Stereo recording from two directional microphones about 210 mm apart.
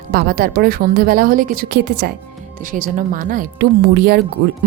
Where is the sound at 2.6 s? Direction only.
40° right (ahead or behind).